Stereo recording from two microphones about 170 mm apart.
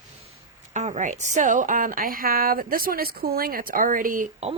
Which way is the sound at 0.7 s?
45° right (ahead or behind).